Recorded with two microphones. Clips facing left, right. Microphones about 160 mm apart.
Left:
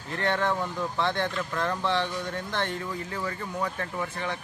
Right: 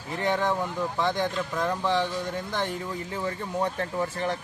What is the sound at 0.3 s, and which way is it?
A man's voice, 15° right (ahead or behind).